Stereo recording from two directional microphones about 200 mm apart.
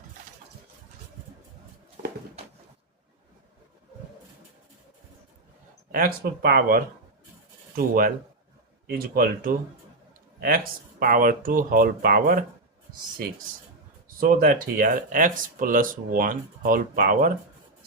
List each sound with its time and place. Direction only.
5.9 s speech: 45° right (ahead or behind)
14.2 s speech: 45° right (ahead or behind)